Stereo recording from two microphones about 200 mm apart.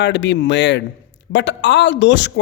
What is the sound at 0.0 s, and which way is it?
A man's voice, 60° left (ahead or behind).